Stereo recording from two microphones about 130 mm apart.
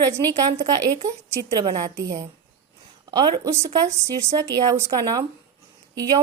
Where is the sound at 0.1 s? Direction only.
25° right (ahead or behind).